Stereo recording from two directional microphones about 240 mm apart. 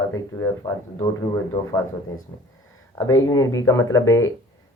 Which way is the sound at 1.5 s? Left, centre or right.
Centre.